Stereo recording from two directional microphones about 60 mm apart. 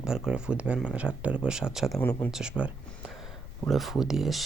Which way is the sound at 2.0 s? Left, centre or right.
Left.